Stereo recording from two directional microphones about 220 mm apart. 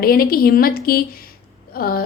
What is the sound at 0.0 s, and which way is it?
A woman's voice, 40° left (ahead or behind).